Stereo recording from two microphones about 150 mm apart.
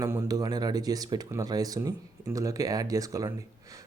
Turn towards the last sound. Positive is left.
turn(degrees=-25)  # may be behind; listen again after turning